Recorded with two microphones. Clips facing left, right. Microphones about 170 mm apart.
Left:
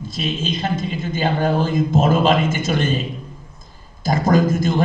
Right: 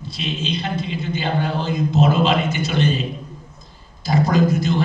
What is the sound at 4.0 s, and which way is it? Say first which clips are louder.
Speech: left 1 dB; 45° left (ahead or behind).